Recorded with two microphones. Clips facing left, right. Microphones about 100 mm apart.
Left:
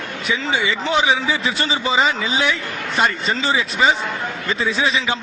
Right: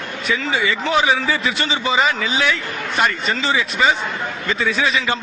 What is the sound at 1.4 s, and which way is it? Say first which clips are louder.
A man's voice: even; 30° left (ahead or behind).